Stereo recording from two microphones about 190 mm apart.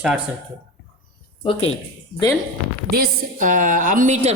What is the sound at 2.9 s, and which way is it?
A woman's voice, 45° right (ahead or behind).